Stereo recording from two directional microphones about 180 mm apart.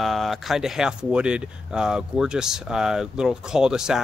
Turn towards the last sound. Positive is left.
turn(degrees=-5)  # may be behind; listen again after turning